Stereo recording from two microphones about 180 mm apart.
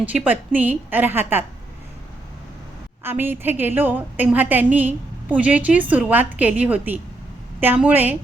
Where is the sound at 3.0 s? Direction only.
10° right (ahead or behind).